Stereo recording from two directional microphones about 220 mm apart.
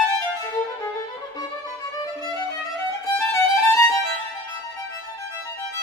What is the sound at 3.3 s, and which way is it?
Violin, 10° left (ahead or behind).